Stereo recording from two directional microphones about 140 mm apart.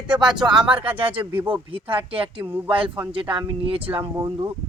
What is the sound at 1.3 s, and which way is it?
Speech, 15° right (ahead or behind).